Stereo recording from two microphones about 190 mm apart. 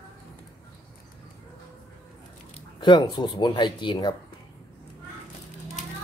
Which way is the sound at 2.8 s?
25° left (ahead or behind).